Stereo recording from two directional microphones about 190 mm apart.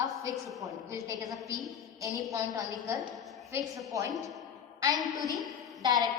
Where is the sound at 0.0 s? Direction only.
15° right (ahead or behind).